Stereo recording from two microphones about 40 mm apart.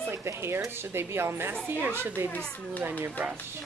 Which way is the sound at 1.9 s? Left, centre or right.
Right.